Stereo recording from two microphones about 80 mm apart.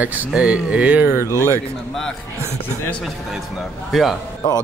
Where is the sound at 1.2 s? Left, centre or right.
Left.